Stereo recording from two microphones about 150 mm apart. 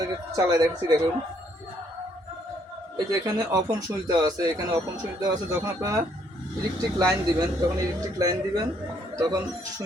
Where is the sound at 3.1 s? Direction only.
25° right (ahead or behind).